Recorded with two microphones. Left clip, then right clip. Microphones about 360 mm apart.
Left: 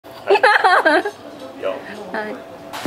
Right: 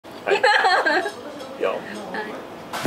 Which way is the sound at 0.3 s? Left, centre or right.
Left.